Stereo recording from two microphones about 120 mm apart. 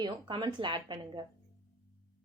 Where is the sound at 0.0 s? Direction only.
40° right (ahead or behind).